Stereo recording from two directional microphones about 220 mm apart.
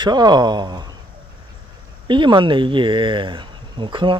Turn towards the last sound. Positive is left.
turn(degrees=-20)  # may be behind; listen again after turning